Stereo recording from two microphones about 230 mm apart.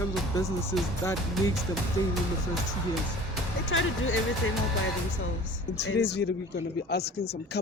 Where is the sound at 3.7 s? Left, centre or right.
Left.